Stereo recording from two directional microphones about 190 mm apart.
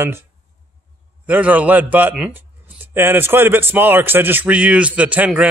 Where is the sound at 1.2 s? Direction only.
10° right (ahead or behind).